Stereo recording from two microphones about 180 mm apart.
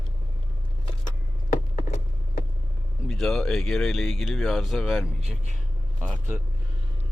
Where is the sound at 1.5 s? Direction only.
40° left (ahead or behind).